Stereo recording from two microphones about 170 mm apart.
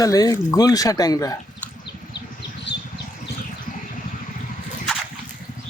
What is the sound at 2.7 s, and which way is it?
Vehicle, 90° left.